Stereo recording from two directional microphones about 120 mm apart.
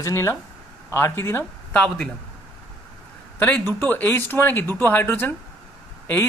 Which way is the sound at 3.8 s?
15° left (ahead or behind).